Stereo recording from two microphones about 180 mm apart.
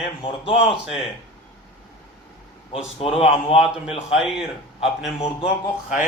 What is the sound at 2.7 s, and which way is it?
Speech, 30° left (ahead or behind).